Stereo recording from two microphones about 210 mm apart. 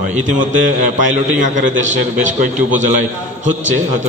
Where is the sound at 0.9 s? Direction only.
35° right (ahead or behind).